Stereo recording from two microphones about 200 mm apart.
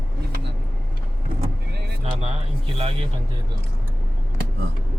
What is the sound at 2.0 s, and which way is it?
Speech, 30° right (ahead or behind).